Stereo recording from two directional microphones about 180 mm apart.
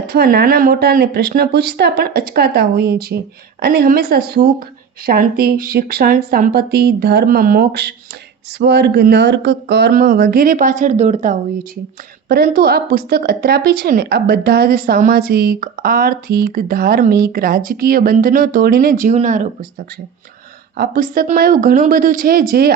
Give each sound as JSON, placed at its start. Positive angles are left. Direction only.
{"t": 0.1, "sound": "speech", "side_deg": -60}
{"t": 12.3, "sound": "speech", "side_deg": -60}
{"t": 20.7, "sound": "speech", "side_deg": -55}